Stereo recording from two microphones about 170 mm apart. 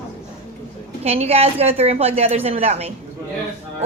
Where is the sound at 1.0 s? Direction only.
35° right (ahead or behind).